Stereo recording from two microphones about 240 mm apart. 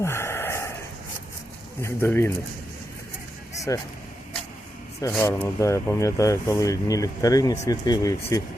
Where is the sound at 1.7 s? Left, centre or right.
Centre.